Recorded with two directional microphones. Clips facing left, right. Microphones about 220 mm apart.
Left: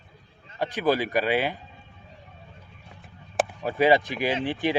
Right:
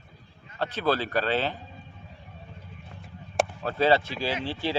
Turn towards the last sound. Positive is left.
turn(degrees=15)  # may be behind; listen again after turning